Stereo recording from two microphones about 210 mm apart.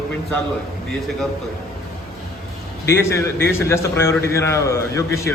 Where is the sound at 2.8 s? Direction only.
10° left (ahead or behind).